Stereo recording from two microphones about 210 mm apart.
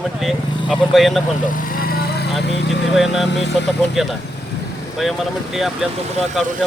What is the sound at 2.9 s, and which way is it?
Speech, centre (ahead or behind).